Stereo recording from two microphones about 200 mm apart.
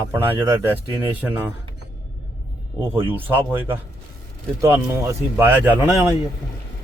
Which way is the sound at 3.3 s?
10° right (ahead or behind).